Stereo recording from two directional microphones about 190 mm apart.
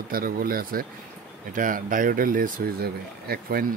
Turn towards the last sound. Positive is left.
turn(degrees=-55)  # may be behind; listen again after turning